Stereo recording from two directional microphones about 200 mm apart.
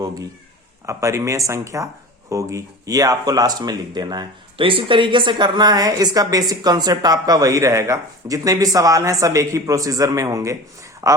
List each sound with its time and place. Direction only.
0.9 s speech: 15° right (ahead or behind)